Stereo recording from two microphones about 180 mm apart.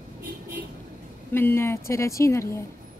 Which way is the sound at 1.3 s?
15° left (ahead or behind).